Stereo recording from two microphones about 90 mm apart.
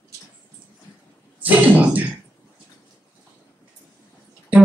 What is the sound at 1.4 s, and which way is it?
Throat clearing, 20° right (ahead or behind).